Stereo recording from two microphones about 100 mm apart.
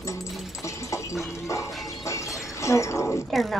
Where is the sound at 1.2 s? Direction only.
30° left (ahead or behind).